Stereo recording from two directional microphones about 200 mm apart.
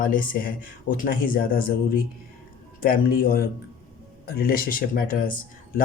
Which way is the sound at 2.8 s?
45° left (ahead or behind).